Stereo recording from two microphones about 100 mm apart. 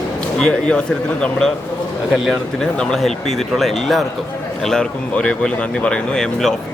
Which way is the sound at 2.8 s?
5° left (ahead or behind).